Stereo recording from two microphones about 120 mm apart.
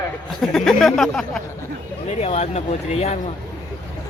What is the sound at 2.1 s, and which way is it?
Speech, 60° left (ahead or behind).